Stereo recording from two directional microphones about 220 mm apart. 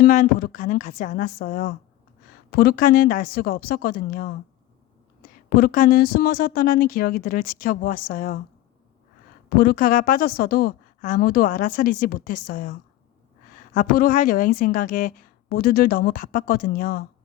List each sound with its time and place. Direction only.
0.0 s a woman's voice: 40° left (ahead or behind)
9.5 s a woman's voice: 40° left (ahead or behind)